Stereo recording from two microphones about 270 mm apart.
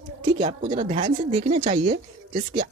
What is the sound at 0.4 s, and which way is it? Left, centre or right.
Speech, right.